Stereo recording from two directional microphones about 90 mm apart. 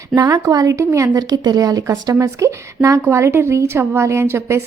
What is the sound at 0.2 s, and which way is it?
Speech, 40° right (ahead or behind).